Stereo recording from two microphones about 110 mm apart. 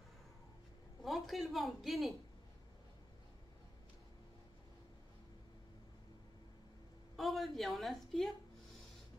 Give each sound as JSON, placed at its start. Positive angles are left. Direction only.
{"t": 1.0, "sound": "a woman's voice", "side_deg": 0}
{"t": 7.2, "sound": "a woman's voice", "side_deg": 0}